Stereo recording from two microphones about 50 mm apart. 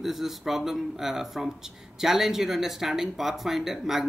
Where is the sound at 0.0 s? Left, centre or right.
Centre.